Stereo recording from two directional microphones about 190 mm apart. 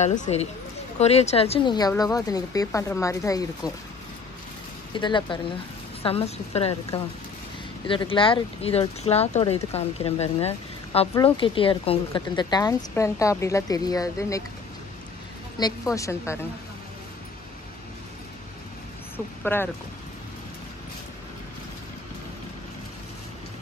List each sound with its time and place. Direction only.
0.0 s a woman's voice: 40° left (ahead or behind); by 3.7 s 20° left (ahead or behind)
4.9 s a woman's voice: 25° left (ahead or behind)
15.6 s a woman's voice: 20° left (ahead or behind)
19.1 s speech: 10° left (ahead or behind)